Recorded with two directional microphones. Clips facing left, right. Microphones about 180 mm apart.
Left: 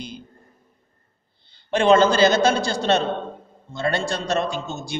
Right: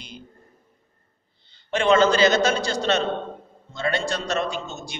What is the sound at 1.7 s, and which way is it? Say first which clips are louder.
A man's voice: left 2 dB; 30° left (ahead or behind).